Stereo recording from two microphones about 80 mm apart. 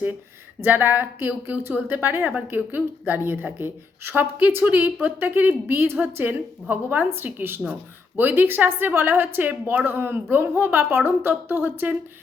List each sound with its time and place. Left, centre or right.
0.6 s a woman's voice: right